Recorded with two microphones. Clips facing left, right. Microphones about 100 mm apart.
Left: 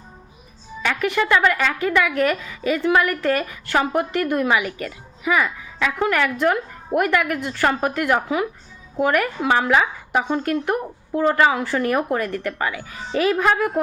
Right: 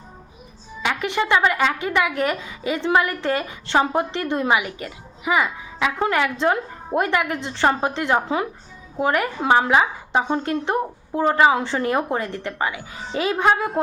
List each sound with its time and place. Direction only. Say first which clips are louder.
0.8 s a woman's voice: left 2 dB; 20° right (ahead or behind)